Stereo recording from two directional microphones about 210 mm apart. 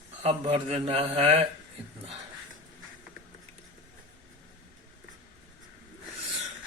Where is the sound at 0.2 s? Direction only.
25° right (ahead or behind).